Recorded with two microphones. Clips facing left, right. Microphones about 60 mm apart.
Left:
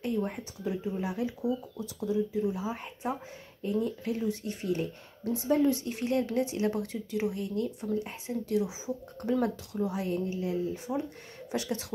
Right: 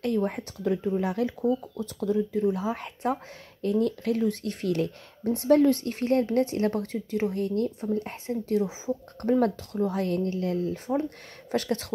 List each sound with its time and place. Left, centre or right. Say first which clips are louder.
0.0 s speech: right 5 dB; right
5.3 s speech: right 6 dB; right
10.0 s speech: right 4 dB; right